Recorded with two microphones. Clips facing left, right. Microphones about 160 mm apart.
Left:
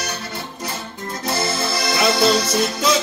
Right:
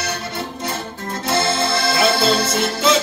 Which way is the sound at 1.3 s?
25° right (ahead or behind).